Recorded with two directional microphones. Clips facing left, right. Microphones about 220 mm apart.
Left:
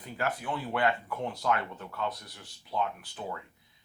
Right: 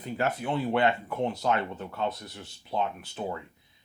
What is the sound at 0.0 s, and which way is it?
Speech, 25° right (ahead or behind).